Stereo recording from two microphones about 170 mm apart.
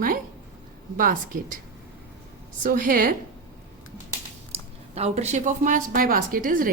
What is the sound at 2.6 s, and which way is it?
Speech, 55° right (ahead or behind).